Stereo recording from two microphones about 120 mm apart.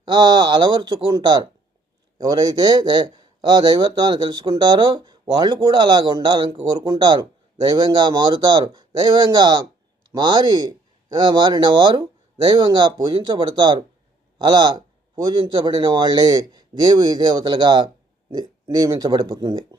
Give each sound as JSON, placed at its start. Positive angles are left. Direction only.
{"t": 0.0, "sound": "a man's voice", "side_deg": -40}